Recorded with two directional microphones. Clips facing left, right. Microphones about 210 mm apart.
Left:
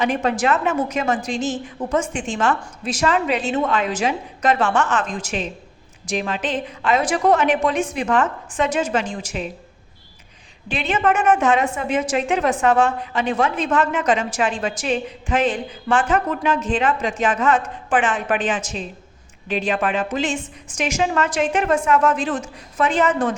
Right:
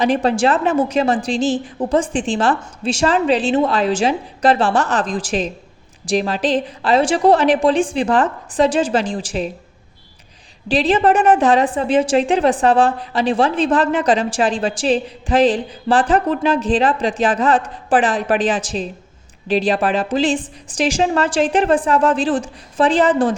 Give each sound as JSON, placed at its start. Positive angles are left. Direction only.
{"t": 0.0, "sound": "a woman's voice", "side_deg": -35}
{"t": 10.7, "sound": "a woman's voice", "side_deg": -35}